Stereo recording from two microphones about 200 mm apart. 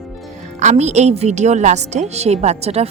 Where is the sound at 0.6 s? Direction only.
35° right (ahead or behind).